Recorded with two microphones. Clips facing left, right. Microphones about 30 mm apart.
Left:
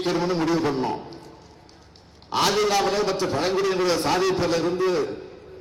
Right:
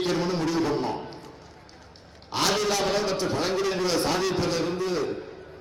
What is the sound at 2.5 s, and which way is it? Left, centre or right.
A man's voice, centre.